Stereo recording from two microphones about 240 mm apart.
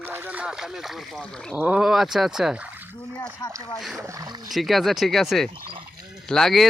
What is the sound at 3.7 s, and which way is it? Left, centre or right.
Speech, centre.